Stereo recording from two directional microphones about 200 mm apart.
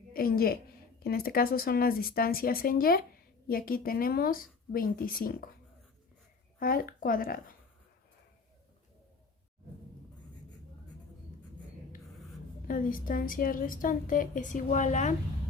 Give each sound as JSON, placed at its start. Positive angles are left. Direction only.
{"t": 0.1, "sound": "a woman's voice", "side_deg": 50}
{"t": 6.6, "sound": "a woman's voice", "side_deg": 45}
{"t": 12.6, "sound": "a woman's voice", "side_deg": 45}